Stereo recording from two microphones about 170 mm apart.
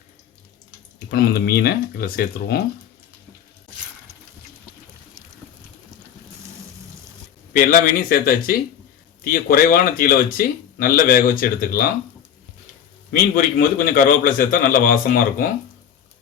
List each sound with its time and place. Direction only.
1.1 s speech: 65° left (ahead or behind)
7.5 s speech: 60° left (ahead or behind)
13.1 s a man's voice: 55° left (ahead or behind)